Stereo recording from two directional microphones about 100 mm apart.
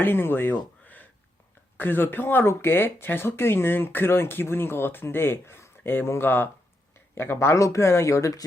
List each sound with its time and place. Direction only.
0.0 s speech: 20° left (ahead or behind)